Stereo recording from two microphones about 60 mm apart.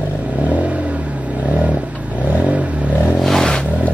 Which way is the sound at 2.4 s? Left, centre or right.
Right.